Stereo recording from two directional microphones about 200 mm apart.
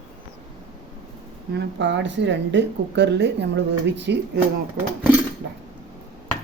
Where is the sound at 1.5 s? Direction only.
60° right (ahead or behind).